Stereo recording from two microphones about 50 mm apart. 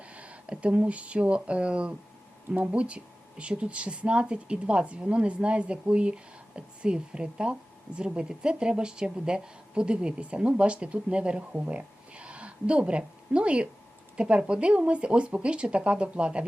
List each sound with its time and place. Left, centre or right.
0.0 s a woman's voice: right